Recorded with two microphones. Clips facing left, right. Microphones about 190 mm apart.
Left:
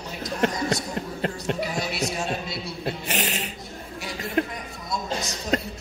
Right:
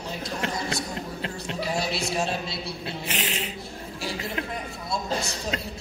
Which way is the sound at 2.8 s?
45° left (ahead or behind).